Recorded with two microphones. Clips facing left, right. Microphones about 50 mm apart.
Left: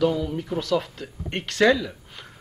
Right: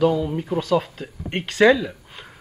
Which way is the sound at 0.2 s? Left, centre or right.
Right.